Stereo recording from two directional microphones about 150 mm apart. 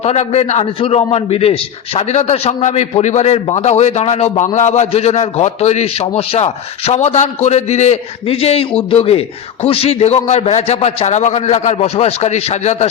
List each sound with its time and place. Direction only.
0.0 s a man's voice: 45° left (ahead or behind)